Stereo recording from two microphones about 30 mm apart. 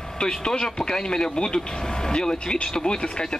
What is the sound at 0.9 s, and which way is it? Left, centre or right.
A man's voice, left.